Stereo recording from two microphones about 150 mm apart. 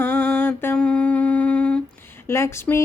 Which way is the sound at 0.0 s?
15° left (ahead or behind).